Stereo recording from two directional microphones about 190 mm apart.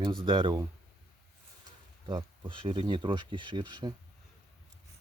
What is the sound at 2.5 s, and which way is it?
Speech, 25° right (ahead or behind).